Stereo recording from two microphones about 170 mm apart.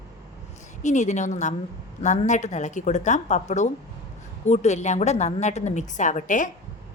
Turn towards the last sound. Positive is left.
turn(degrees=50)  # may be behind; listen again after turning